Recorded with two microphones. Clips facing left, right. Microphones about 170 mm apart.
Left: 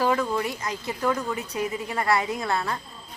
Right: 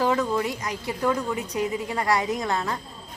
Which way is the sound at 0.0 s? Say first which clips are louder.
Right 1 dB; 20° right (ahead or behind).